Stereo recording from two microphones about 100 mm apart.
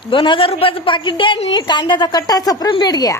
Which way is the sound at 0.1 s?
60° left (ahead or behind).